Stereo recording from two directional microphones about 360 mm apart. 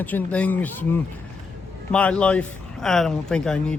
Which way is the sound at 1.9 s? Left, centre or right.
Centre.